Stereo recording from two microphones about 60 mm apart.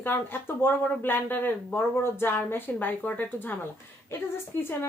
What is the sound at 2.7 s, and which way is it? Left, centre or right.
Speech, left.